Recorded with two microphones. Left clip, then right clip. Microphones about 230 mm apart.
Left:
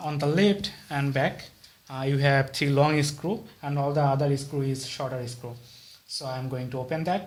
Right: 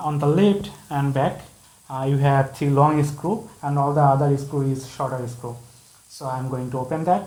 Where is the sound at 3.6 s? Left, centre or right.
Left.